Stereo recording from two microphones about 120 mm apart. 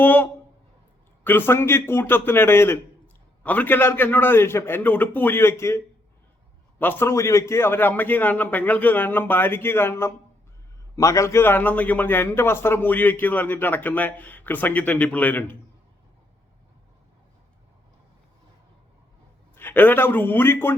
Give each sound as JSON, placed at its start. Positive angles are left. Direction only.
{"t": 0.0, "sound": "a man's voice", "side_deg": 15}
{"t": 19.5, "sound": "a man's voice", "side_deg": 15}